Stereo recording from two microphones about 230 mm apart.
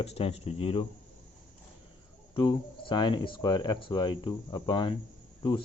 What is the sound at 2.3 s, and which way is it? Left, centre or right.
Speech, left.